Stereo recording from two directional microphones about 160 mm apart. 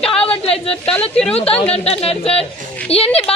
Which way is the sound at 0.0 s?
5° left (ahead or behind).